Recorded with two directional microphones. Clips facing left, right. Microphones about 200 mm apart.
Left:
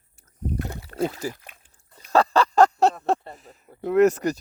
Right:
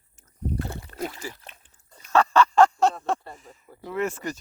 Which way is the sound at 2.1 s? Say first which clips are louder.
Even; 35° left (ahead or behind).